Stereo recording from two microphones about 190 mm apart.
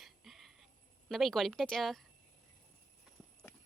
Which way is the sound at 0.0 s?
Centre (ahead or behind).